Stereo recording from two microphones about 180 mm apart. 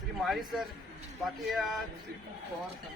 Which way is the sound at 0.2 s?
Centre (ahead or behind).